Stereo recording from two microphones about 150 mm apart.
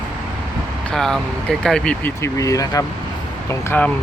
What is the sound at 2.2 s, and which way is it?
Speech, 20° left (ahead or behind).